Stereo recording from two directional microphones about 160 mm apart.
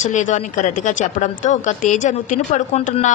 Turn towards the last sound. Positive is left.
turn(degrees=45)  # may be behind; listen again after turning